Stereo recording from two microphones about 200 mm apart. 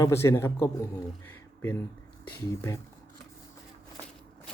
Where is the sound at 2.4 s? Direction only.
15° left (ahead or behind).